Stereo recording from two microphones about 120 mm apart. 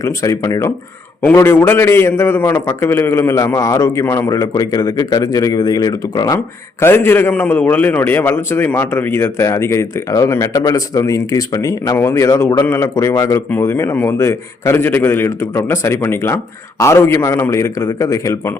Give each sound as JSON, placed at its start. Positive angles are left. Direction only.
{"t": 0.0, "sound": "speech", "side_deg": 25}